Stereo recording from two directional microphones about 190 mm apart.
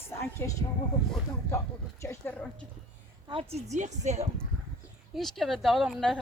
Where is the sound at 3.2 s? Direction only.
30° right (ahead or behind).